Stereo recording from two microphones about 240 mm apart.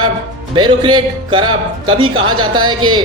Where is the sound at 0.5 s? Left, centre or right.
Centre.